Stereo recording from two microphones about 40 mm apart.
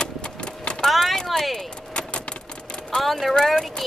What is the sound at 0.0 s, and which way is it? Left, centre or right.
Clip-clop, left.